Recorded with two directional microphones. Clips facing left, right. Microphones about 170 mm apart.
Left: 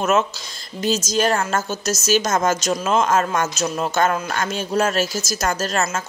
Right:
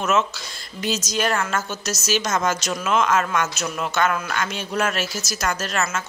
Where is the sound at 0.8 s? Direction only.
40° left (ahead or behind).